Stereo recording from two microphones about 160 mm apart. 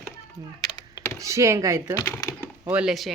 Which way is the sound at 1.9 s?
15° left (ahead or behind).